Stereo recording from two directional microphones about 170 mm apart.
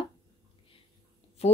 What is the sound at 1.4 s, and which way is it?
Speech, 40° left (ahead or behind).